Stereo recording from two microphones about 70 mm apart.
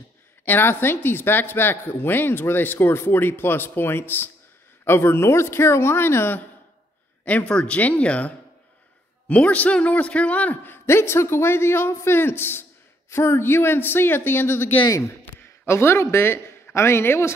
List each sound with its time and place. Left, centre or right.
0.5 s speech: left
7.2 s speech: centre
9.3 s speech: centre
14.9 s a man's voice: left